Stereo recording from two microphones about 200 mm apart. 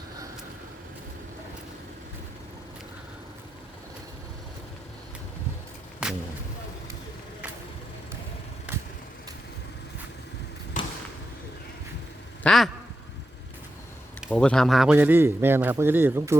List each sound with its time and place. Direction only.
6.0 s a sound: 5° right (ahead or behind)
10.8 s basketball bounce: 40° left (ahead or behind)
12.4 s speech: centre (ahead or behind)
14.3 s a man's voice: 5° left (ahead or behind); by 16.4 s 10° right (ahead or behind)